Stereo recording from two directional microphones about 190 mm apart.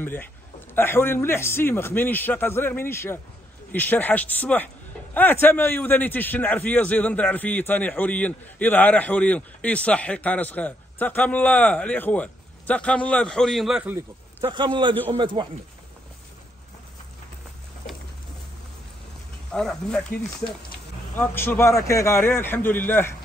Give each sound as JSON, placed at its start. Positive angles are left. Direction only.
{"t": 0.0, "sound": "a man's voice", "side_deg": 10}
{"t": 14.4, "sound": "a man's voice", "side_deg": -25}
{"t": 19.5, "sound": "a man's voice", "side_deg": 5}
{"t": 21.2, "sound": "a man's voice", "side_deg": 10}